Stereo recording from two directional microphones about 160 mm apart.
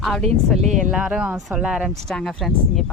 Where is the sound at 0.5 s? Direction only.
45° right (ahead or behind).